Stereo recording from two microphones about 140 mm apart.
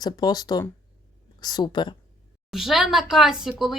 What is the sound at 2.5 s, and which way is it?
Speech, centre (ahead or behind).